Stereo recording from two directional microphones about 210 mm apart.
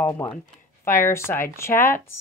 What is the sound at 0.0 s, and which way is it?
A woman's voice, 10° left (ahead or behind).